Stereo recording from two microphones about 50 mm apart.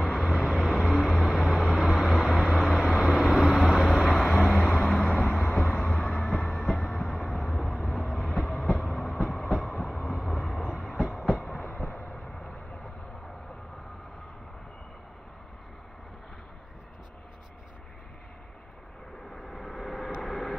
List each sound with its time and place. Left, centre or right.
0.0 s vehicle: centre
5.5 s a sound: centre
6.2 s train: centre
6.6 s vehicle: centre
8.4 s train: centre
12.1 s vehicle: centre
19.3 s vehicle: centre